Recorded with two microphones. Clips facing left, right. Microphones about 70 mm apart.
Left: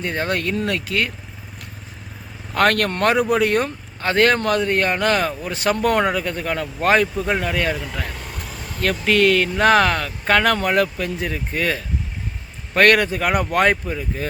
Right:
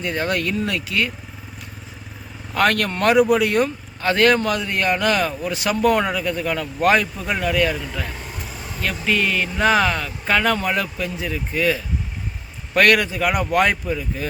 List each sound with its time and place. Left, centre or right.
0.0 s speech: left
0.5 s speech: left
2.6 s speech: left
7.3 s speech: left
7.5 s speech: left
8.0 s vehicle: centre
8.8 s speech: left